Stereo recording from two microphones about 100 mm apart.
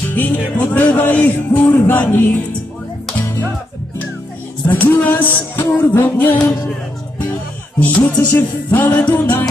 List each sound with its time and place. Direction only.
0.1 s music: 20° left (ahead or behind)
4.6 s music: 15° left (ahead or behind)
7.8 s music: 15° left (ahead or behind)